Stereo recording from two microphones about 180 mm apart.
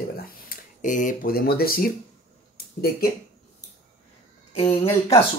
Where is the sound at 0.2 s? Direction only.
50° left (ahead or behind).